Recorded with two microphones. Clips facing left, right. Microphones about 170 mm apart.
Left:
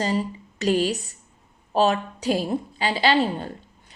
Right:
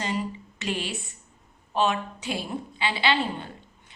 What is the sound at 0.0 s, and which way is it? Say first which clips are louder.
A woman's voice: left 5 dB; 35° left (ahead or behind).